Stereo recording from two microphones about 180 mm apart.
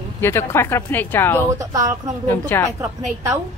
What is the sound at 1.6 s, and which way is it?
Speech, 20° right (ahead or behind).